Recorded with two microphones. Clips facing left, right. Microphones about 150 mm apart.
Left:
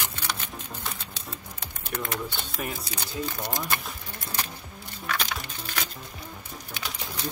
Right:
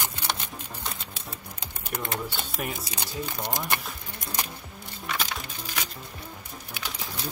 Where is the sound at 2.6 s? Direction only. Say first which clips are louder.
Even; centre (ahead or behind).